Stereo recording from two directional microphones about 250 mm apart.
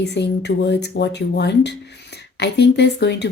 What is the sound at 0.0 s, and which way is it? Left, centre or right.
Speech, left.